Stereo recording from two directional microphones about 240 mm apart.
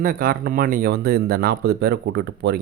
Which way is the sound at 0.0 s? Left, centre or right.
Right.